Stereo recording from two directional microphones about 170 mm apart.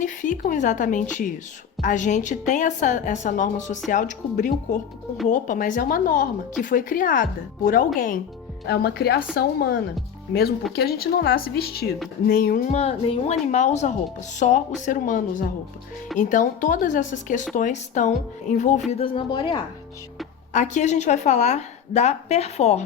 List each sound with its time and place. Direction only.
0.0 s a woman's voice: 50° left (ahead or behind)
8.6 s speech: 75° left (ahead or behind)
10.8 s speech: 65° left (ahead or behind)
12.7 s a woman's voice: 40° left (ahead or behind)
18.9 s speech: 35° left (ahead or behind)
20.5 s a woman's voice: 45° left (ahead or behind)